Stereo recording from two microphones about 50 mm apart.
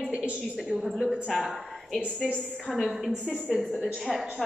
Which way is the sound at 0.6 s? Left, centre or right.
Centre.